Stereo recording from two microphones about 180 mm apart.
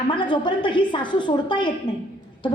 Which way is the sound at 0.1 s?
25° left (ahead or behind).